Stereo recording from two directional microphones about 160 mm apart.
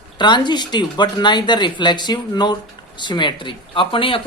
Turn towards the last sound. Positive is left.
turn(degrees=35)  # may be behind; listen again after turning